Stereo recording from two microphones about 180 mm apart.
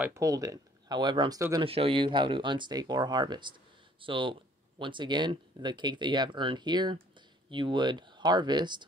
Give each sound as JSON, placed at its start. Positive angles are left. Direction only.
{"t": 0.0, "sound": "speech", "side_deg": -20}